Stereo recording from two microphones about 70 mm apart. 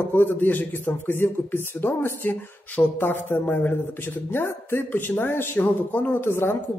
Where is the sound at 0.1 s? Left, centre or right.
Left.